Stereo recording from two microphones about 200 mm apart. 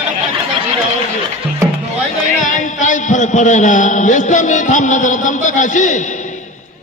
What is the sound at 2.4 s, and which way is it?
A man's voice, 40° left (ahead or behind).